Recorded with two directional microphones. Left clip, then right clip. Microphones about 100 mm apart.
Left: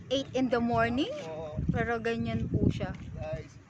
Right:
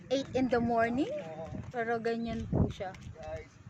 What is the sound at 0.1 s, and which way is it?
Speech, 30° right (ahead or behind).